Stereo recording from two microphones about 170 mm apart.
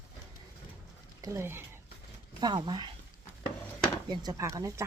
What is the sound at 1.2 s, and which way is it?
Speech, 15° right (ahead or behind).